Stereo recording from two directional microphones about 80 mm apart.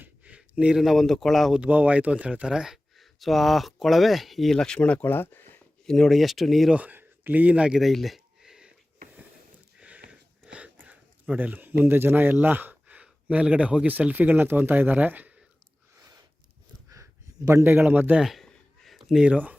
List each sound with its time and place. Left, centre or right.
0.0 s speech: centre
1.5 s speech: centre
4.5 s speech: centre; by 5.4 s left
5.8 s speech: centre
6.7 s speech: right
7.8 s a sound: centre
9.7 s a sound: centre
10.5 s speech: centre
16.0 s a sound: right
17.6 s speech: right
18.2 s speech: centre
18.4 s a sound: centre
19.2 s speech: centre